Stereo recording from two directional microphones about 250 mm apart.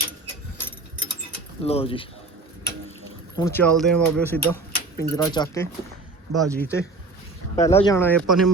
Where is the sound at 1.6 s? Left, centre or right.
Left.